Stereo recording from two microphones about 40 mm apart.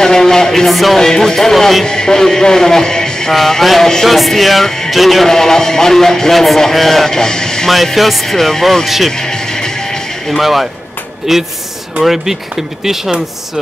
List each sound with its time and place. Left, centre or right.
0.0 s a sound: centre
0.9 s a man's voice: centre
1.9 s a man's voice: centre
4.9 s music: centre
5.3 s a man's voice: centre
7.7 s music: centre
8.8 s music: centre
9.1 s music: centre
10.3 s music: centre
11.3 s speech: centre